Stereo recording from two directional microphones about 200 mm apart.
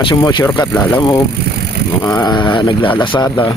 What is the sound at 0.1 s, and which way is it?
Speech, 20° left (ahead or behind).